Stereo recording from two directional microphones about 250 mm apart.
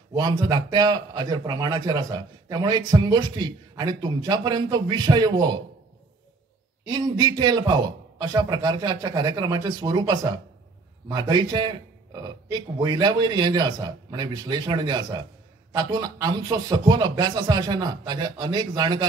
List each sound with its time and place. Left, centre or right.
0.1 s a man's voice: centre
7.2 s a man's voice: centre